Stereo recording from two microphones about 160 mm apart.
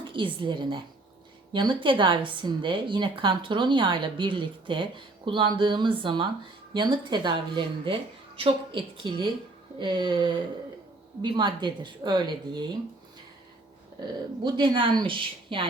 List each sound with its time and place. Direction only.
0.1 s a woman's voice: 30° right (ahead or behind)
14.4 s speech: 30° right (ahead or behind)